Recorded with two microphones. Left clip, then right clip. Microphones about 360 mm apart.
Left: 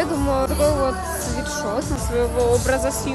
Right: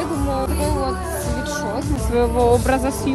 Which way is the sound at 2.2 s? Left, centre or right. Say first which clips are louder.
Right 3 dB; centre.